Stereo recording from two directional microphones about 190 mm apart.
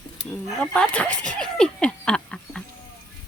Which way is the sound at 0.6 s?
5° left (ahead or behind).